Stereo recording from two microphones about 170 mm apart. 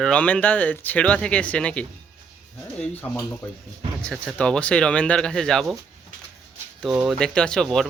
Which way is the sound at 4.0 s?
5° left (ahead or behind).